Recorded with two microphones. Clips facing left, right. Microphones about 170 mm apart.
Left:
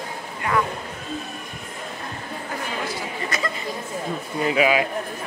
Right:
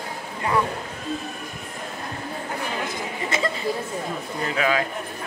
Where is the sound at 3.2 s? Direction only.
25° right (ahead or behind).